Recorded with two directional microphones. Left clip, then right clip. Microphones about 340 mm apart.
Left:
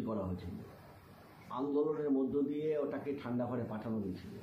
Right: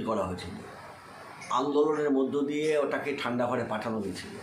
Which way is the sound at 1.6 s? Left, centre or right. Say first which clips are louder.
Right 9 dB; right.